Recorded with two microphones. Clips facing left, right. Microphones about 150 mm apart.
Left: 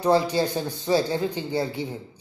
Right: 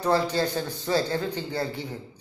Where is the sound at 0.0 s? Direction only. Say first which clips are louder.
Left 3 dB; 15° left (ahead or behind).